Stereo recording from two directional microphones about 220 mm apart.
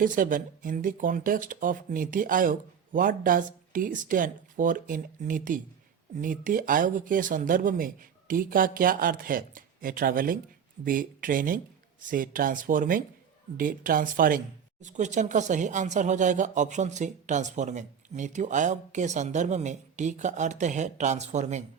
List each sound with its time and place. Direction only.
0.0 s speech: 40° right (ahead or behind)